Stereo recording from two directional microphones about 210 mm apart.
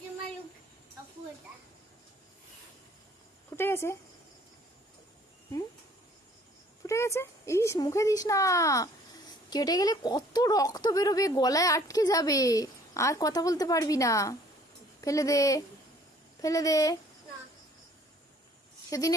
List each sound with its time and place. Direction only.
3.5 s a sound: 10° left (ahead or behind)
6.8 s speech: 15° left (ahead or behind)
18.9 s speech: 15° left (ahead or behind)